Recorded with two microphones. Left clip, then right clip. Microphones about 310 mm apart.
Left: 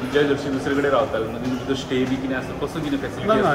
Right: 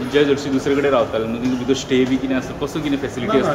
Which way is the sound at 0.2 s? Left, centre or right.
Right.